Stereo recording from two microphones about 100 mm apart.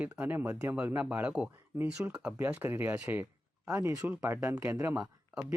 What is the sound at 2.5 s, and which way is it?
Speech, 20° right (ahead or behind).